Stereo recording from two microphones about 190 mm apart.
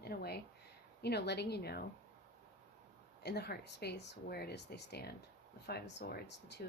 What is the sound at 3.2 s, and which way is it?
A woman's voice, 60° left (ahead or behind).